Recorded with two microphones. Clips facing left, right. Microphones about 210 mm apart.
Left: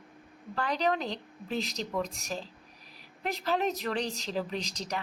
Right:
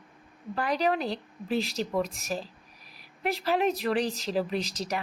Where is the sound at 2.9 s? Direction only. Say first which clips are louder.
Right 4 dB; 10° right (ahead or behind).